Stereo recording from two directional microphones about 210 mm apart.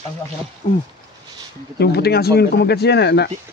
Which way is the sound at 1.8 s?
50° left (ahead or behind).